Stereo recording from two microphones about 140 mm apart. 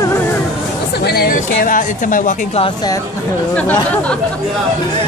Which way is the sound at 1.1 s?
90° left.